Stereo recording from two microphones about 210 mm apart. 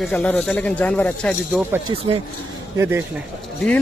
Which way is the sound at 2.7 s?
15° right (ahead or behind).